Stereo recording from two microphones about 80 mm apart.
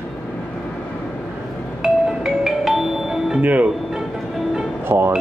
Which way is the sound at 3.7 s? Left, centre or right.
Centre.